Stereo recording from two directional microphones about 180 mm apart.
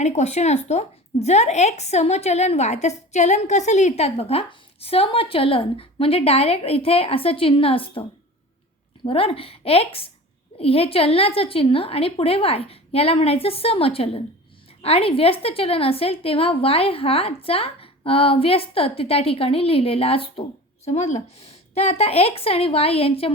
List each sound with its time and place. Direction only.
0.0 s speech: 40° left (ahead or behind)
9.0 s speech: 30° left (ahead or behind)